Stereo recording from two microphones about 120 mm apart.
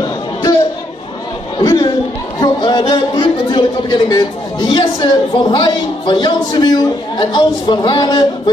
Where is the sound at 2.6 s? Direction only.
40° left (ahead or behind).